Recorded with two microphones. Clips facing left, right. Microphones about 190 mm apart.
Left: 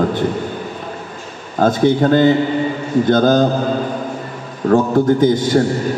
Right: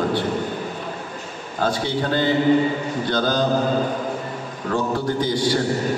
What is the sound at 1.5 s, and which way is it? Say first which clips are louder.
A man's voice: left 9 dB; 50° left (ahead or behind).